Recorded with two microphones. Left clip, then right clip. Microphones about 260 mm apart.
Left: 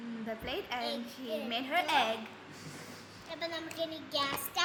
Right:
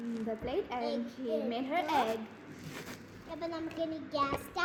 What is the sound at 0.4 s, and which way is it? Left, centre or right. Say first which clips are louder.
A woman's voice: right 1 dB; centre.